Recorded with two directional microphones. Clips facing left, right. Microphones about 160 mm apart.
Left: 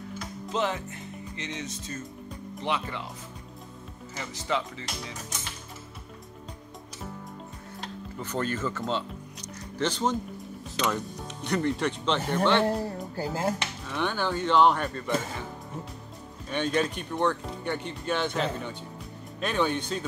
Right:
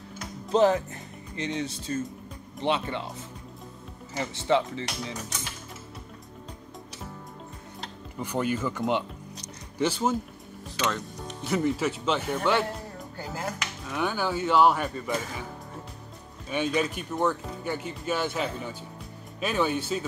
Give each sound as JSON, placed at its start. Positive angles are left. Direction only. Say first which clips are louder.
{"t": 0.5, "sound": "speech", "louder": "right 8 dB", "side_deg": -40}
{"t": 4.2, "sound": "speech", "louder": "right 6 dB", "side_deg": -25}
{"t": 8.2, "sound": "speech", "louder": "right 2 dB", "side_deg": -10}
{"t": 12.6, "sound": "speech", "louder": "left 8 dB", "side_deg": 40}
{"t": 13.8, "sound": "speech", "louder": "right 1 dB", "side_deg": -5}
{"t": 16.4, "sound": "speech", "louder": "even", "side_deg": -5}